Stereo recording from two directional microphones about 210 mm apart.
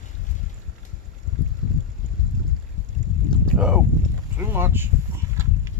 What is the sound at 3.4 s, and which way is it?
Boat, 5° right (ahead or behind).